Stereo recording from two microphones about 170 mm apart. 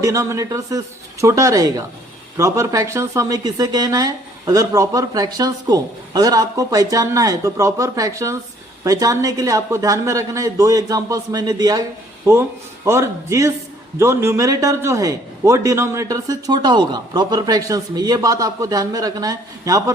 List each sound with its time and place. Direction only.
0.0 s speech: 20° right (ahead or behind)